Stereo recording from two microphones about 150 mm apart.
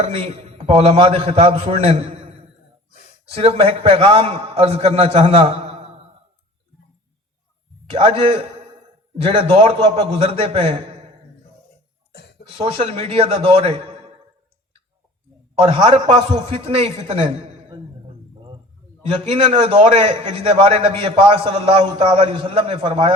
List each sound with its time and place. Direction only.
0.0 s a man's voice: 45° right (ahead or behind)
7.9 s a man's voice: 35° right (ahead or behind)
12.5 s a man's voice: 40° right (ahead or behind)
15.5 s a man's voice: 40° right (ahead or behind)
19.0 s a man's voice: 40° right (ahead or behind)